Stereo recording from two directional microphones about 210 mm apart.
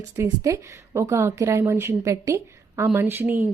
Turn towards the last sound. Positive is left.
turn(degrees=-10)  # may be behind; listen again after turning